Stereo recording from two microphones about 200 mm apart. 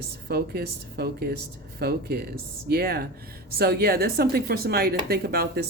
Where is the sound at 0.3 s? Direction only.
50° right (ahead or behind).